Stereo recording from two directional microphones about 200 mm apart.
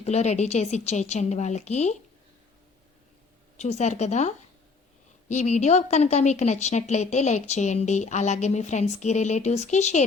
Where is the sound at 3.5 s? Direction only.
35° left (ahead or behind).